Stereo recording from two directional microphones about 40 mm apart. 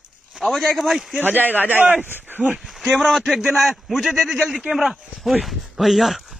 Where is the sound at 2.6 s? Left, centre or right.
Centre.